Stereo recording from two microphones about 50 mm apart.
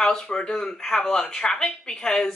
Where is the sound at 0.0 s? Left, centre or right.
Centre.